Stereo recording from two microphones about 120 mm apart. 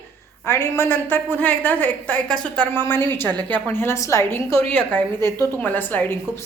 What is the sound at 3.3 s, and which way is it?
Speech, 35° right (ahead or behind).